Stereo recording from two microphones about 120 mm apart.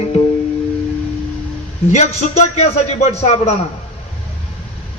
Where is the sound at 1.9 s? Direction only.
75° left (ahead or behind).